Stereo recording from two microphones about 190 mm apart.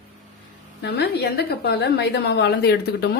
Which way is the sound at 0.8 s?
60° left (ahead or behind).